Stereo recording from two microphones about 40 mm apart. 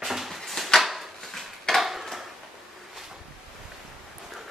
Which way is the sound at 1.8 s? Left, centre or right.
Centre.